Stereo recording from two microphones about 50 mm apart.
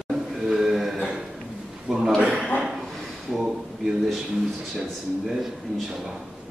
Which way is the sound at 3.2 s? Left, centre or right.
Centre.